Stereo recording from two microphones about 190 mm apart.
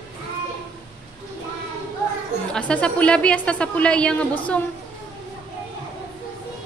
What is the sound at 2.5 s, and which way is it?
Speech, 5° left (ahead or behind).